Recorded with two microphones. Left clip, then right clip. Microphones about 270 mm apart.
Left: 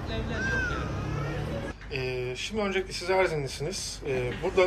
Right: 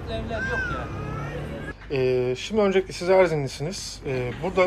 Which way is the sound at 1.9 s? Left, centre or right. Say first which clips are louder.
Right 10 dB; centre.